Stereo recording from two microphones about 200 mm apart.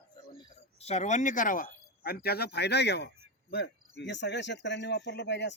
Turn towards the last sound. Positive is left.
turn(degrees=60)  # may be behind; listen again after turning